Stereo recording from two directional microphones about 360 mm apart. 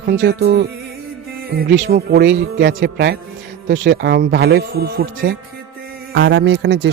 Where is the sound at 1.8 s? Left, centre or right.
Right.